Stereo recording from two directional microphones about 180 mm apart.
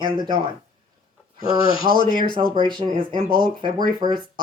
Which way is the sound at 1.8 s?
25° right (ahead or behind).